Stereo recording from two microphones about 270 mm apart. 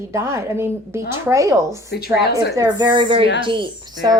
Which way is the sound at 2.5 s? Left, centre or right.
Centre.